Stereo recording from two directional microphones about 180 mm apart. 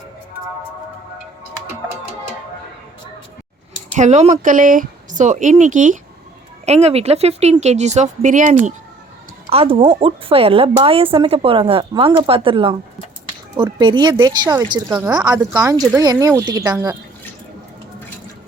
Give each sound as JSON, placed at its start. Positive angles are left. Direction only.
{"t": 3.9, "sound": "speech", "side_deg": -40}
{"t": 9.5, "sound": "speech", "side_deg": -30}